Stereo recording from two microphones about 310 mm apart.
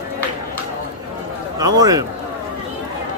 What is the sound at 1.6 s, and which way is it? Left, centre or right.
Speech, centre.